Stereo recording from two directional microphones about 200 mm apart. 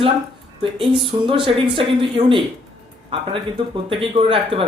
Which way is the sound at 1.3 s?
25° right (ahead or behind).